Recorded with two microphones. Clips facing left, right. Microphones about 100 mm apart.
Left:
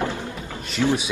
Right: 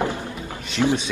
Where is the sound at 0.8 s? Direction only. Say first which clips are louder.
Right 1 dB; 30° right (ahead or behind).